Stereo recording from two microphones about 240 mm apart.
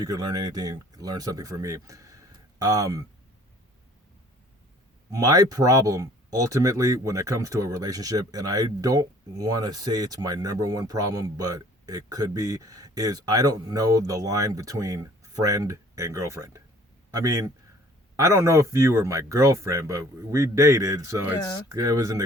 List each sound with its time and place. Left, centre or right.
0.0 s speech: centre
5.1 s a man's voice: centre